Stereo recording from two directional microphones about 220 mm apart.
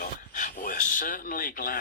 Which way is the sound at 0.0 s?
35° left (ahead or behind).